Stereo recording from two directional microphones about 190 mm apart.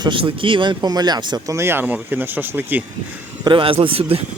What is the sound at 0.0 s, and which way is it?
Speech, 25° right (ahead or behind).